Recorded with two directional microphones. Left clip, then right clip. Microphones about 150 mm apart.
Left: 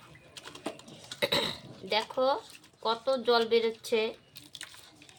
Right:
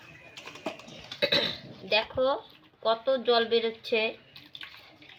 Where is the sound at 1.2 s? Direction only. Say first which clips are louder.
Right 3 dB; 20° left (ahead or behind).